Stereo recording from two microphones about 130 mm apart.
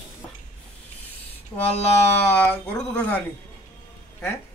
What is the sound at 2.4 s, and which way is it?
Speech, 10° left (ahead or behind).